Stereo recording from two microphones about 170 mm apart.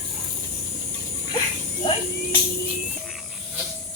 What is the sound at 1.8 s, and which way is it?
Speech, 35° left (ahead or behind).